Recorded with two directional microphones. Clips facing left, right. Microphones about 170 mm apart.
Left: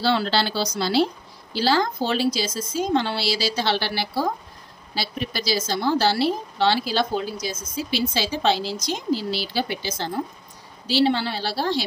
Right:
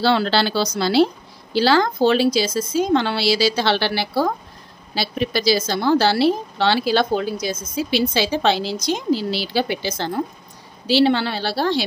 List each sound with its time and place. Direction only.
0.0 s speech: 75° right (ahead or behind)